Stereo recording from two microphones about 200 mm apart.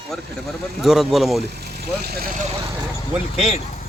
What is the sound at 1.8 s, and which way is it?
Speech, 50° right (ahead or behind).